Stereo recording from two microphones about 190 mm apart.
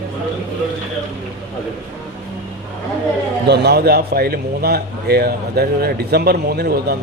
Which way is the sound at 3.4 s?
60° right (ahead or behind).